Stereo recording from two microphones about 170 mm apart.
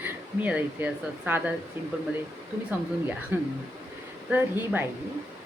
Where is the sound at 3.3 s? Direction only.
10° right (ahead or behind).